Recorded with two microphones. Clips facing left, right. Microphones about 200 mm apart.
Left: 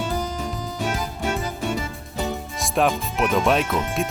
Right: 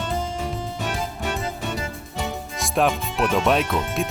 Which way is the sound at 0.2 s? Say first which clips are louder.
Even; 25° right (ahead or behind).